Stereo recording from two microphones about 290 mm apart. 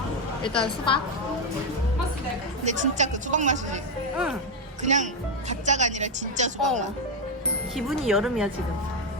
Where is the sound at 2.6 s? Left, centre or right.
Right.